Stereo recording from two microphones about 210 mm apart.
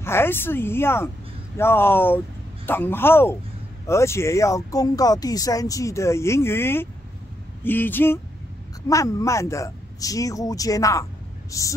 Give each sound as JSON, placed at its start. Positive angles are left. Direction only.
{"t": 0.0, "sound": "speech", "side_deg": 10}